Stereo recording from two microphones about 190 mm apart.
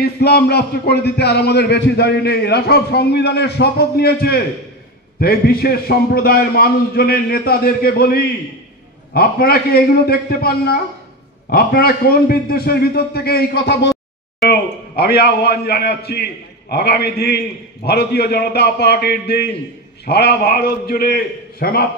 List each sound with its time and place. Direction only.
0.0 s a man's voice: 60° left (ahead or behind)